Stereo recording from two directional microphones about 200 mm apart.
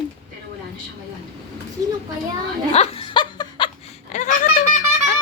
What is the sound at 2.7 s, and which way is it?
Snicker, 30° left (ahead or behind).